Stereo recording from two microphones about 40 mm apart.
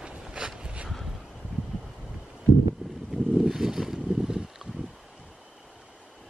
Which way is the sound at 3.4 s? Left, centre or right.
Centre.